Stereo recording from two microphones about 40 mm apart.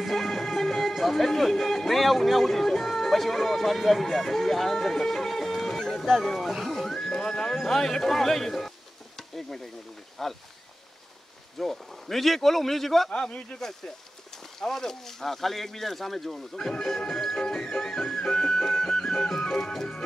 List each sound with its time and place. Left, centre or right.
0.0 s speech: centre
6.7 s music: centre
7.5 s speech: centre
11.5 s a man's voice: centre
17.4 s music: centre
19.7 s speech: centre